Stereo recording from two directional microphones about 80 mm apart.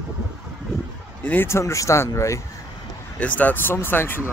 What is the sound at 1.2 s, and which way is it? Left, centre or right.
Speech, left.